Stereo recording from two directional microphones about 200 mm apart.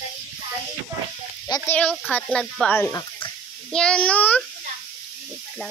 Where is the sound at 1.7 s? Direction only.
5° left (ahead or behind).